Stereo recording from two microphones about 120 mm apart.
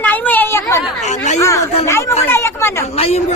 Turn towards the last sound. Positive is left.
turn(degrees=55)  # may be behind; listen again after turning